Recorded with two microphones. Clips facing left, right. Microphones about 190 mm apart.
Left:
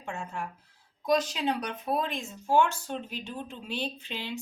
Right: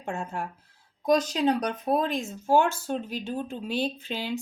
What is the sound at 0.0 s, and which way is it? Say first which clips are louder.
Speech: right 4 dB; 40° right (ahead or behind).